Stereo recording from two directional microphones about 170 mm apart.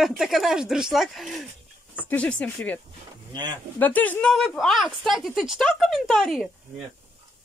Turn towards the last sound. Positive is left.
turn(degrees=0)  # may be behind; listen again after turning